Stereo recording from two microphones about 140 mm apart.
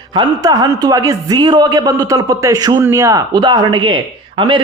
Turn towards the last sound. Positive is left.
turn(degrees=-35)  # may be behind; listen again after turning